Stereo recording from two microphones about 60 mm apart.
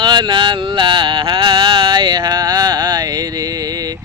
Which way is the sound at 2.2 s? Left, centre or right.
Right.